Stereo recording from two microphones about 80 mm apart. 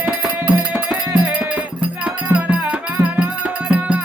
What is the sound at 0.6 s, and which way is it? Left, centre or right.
Music, centre.